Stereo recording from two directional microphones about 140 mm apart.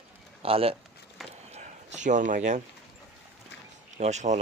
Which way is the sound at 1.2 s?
Centre (ahead or behind).